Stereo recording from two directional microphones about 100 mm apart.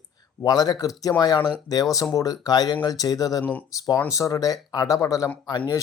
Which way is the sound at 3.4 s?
15° left (ahead or behind).